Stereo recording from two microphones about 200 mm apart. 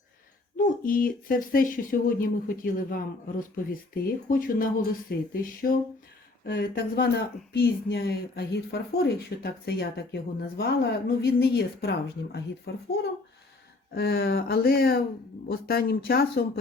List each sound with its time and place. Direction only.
0.5 s a woman's voice: 45° left (ahead or behind)